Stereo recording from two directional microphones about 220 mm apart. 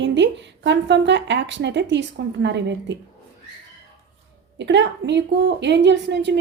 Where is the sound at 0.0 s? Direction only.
55° right (ahead or behind).